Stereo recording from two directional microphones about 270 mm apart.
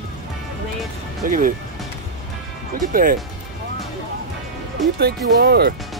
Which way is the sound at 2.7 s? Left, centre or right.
Right.